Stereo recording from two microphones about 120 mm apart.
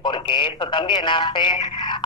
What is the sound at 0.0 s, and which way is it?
A man's voice, 45° left (ahead or behind).